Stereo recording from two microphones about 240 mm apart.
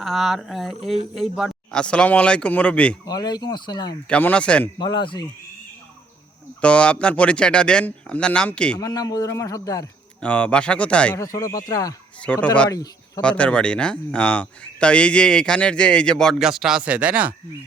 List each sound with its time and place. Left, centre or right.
0.0 s speech: centre
3.1 s a man's voice: centre
4.1 s speech: centre
4.8 s speech: centre
6.6 s speech: centre
8.8 s a man's voice: centre
13.2 s speech: centre